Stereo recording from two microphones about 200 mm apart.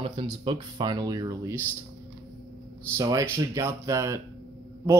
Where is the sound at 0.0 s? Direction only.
25° right (ahead or behind).